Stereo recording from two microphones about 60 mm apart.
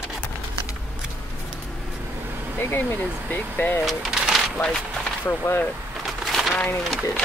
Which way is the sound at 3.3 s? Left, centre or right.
Left.